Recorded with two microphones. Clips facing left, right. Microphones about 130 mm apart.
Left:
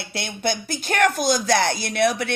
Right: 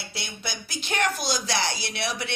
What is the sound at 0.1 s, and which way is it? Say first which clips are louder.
Speech: left 13 dB; 55° left (ahead or behind).